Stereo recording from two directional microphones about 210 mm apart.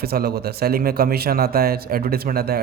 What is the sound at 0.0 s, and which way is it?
Speech, 45° right (ahead or behind).